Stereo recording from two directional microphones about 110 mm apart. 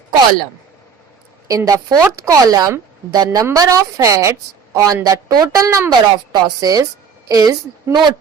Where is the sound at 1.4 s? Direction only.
30° right (ahead or behind).